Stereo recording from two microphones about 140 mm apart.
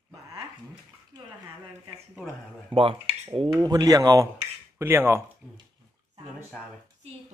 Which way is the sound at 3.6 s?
25° right (ahead or behind).